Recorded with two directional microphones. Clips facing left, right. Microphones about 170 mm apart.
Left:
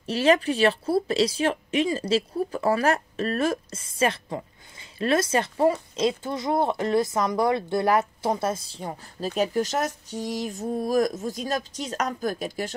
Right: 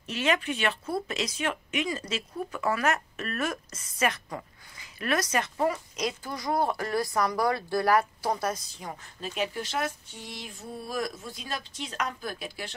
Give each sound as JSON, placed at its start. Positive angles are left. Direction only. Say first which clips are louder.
{"t": 0.0, "sound": "speech", "louder": "left 7 dB", "side_deg": 35}